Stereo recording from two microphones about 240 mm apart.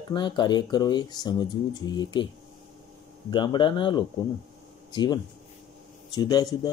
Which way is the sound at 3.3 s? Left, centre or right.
Centre.